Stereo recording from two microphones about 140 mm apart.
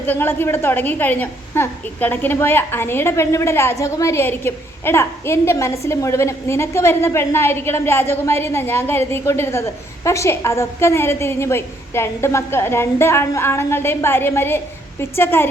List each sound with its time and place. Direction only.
0.0 s a woman's voice: 15° left (ahead or behind)